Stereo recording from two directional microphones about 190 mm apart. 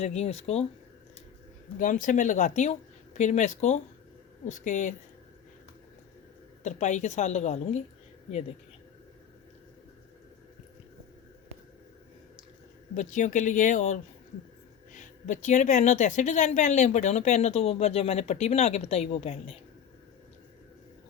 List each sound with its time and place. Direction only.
0.0 s a woman's voice: 35° left (ahead or behind)
1.8 s a woman's voice: 45° left (ahead or behind)
6.6 s a woman's voice: 40° left (ahead or behind)
13.0 s a woman's voice: 40° left (ahead or behind)